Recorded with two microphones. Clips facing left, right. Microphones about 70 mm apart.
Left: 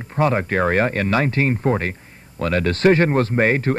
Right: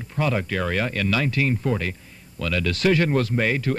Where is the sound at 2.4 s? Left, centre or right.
Left.